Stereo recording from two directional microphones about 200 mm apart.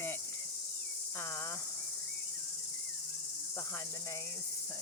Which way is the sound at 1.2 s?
15° left (ahead or behind).